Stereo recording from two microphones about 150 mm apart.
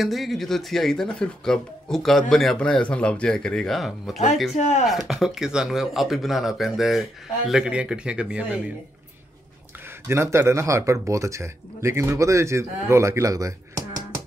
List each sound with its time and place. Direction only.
0.0 s speech: centre (ahead or behind)
4.6 s speech: 50° left (ahead or behind)
4.8 s speech: centre (ahead or behind)
10.0 s speech: 15° right (ahead or behind)